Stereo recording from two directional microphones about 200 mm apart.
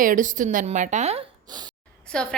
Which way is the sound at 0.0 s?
40° right (ahead or behind).